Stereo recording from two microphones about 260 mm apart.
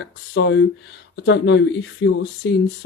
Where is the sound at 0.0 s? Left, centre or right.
Left.